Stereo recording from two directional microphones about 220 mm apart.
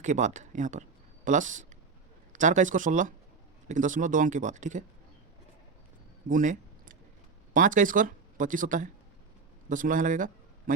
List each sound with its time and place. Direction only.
0.0 s speech: 35° right (ahead or behind)
6.2 s a sound: 35° right (ahead or behind)
7.5 s speech: 35° right (ahead or behind)